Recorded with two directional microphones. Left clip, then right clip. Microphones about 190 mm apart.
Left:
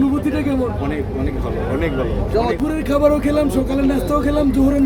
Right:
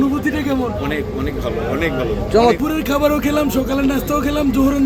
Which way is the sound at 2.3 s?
35° right (ahead or behind).